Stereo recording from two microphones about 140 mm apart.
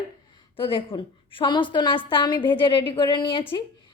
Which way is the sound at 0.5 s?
40° left (ahead or behind).